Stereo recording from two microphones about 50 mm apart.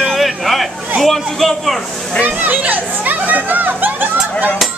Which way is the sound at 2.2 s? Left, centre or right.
Right.